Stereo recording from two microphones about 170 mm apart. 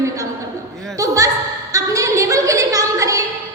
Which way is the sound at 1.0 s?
20° right (ahead or behind).